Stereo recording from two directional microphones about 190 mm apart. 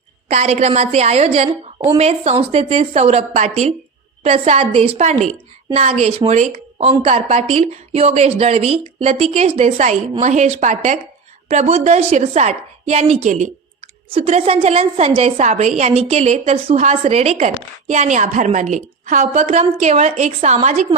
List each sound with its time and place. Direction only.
0.3 s a woman's voice: 35° right (ahead or behind)